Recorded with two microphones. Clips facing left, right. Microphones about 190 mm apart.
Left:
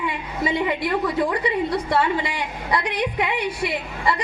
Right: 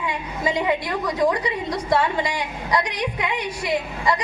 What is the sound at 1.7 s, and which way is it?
A woman's voice, 60° left (ahead or behind).